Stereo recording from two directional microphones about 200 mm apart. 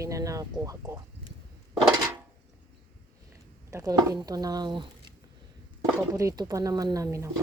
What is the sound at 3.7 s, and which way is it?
Speech, 15° right (ahead or behind).